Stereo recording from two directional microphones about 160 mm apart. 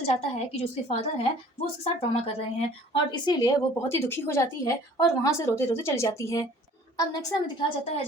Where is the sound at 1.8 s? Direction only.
35° left (ahead or behind).